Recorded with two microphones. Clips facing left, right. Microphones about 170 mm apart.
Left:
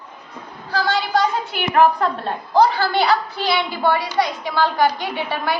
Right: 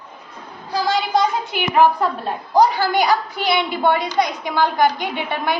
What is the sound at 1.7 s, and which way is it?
A woman's voice, 10° right (ahead or behind).